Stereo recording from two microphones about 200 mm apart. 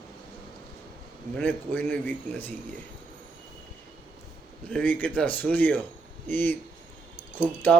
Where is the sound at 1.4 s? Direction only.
10° left (ahead or behind).